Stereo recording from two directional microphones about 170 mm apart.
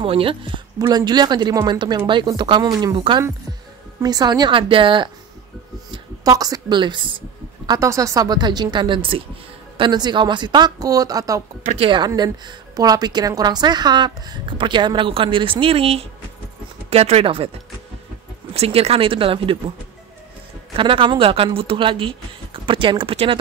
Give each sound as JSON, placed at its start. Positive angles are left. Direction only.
{"t": 0.0, "sound": "a woman's voice", "side_deg": -35}
{"t": 11.7, "sound": "a woman's voice", "side_deg": -30}
{"t": 18.5, "sound": "speech", "side_deg": -35}
{"t": 20.7, "sound": "speech", "side_deg": -30}